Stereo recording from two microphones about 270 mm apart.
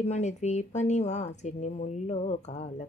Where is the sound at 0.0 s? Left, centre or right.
Left.